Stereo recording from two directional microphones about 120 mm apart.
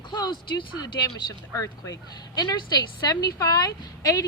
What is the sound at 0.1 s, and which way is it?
Speech, 40° left (ahead or behind).